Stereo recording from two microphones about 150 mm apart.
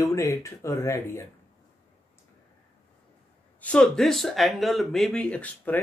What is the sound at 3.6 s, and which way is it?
Speech, 5° left (ahead or behind).